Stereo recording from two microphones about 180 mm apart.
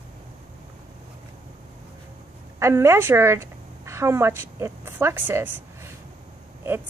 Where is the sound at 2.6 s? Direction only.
15° right (ahead or behind).